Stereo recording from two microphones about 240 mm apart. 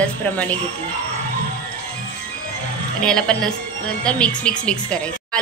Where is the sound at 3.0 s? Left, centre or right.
Centre.